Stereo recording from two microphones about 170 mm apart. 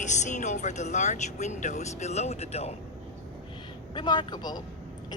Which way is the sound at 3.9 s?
25° left (ahead or behind).